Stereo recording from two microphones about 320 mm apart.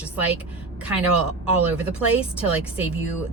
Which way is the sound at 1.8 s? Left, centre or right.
Centre.